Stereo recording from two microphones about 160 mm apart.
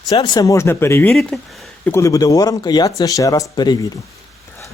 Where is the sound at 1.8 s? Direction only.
15° left (ahead or behind).